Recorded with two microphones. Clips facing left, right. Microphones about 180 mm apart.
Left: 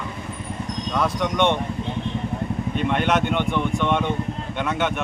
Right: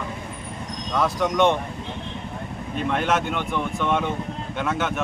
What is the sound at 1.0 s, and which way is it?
Speech, 5° right (ahead or behind).